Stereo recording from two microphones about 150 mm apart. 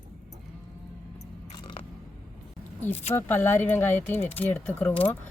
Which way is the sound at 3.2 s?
15° left (ahead or behind).